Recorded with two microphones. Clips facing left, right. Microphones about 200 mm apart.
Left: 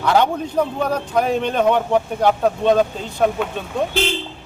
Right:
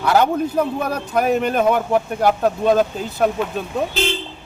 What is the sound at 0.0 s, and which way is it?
A man's voice, 5° right (ahead or behind).